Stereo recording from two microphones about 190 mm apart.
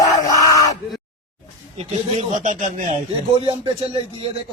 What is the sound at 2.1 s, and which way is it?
Speech, 40° right (ahead or behind).